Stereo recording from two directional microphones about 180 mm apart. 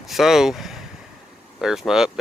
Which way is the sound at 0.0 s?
Centre (ahead or behind).